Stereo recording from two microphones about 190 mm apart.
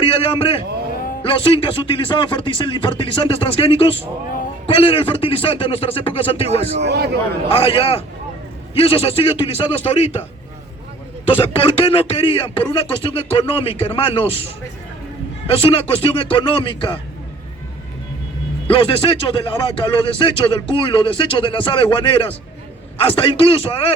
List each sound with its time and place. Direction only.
0.0 s a man's voice: 30° left (ahead or behind)
6.8 s a man's voice: 60° right (ahead or behind)
7.5 s a man's voice: 30° left (ahead or behind)
11.3 s a man's voice: 30° left (ahead or behind)
15.5 s a man's voice: 30° left (ahead or behind)
18.7 s a man's voice: 30° left (ahead or behind)